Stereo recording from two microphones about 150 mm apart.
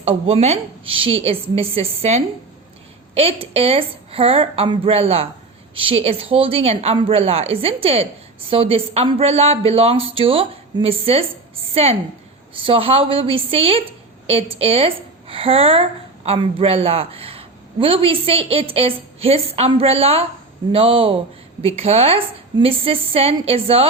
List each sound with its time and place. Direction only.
0.0 s a woman's voice: 40° right (ahead or behind)